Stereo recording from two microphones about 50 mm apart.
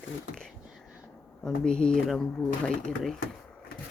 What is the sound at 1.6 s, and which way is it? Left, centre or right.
Speech, centre.